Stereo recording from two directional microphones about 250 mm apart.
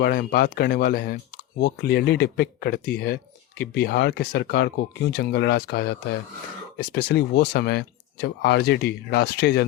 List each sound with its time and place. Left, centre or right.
0.0 s speech: left